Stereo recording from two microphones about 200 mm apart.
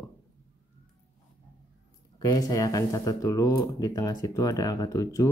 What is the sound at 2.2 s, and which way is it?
Speech, 20° left (ahead or behind).